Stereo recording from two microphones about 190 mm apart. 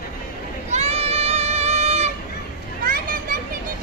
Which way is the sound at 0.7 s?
35° right (ahead or behind).